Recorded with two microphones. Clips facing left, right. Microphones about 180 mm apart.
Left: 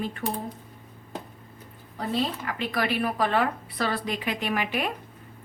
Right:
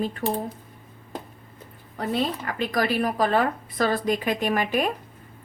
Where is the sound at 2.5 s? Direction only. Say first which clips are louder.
Right 3 dB; 40° right (ahead or behind).